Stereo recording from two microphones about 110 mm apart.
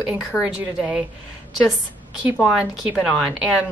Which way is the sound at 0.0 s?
5° right (ahead or behind).